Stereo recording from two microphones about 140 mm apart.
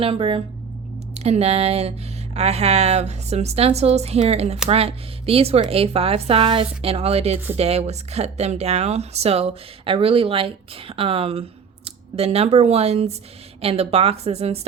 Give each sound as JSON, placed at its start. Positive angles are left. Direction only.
{"t": 0.0, "sound": "speech", "side_deg": -40}